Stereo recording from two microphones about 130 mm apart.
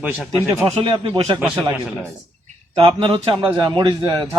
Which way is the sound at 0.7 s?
45° right (ahead or behind).